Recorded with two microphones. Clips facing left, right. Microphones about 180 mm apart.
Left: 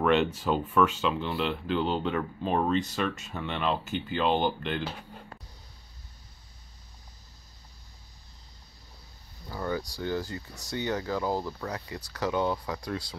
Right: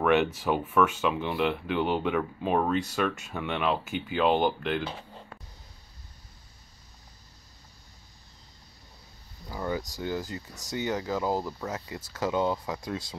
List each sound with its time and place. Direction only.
0.0 s speech: 10° right (ahead or behind)
9.5 s speech: 15° right (ahead or behind)